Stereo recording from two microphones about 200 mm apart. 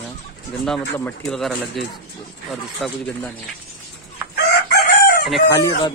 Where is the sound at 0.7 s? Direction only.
5° left (ahead or behind).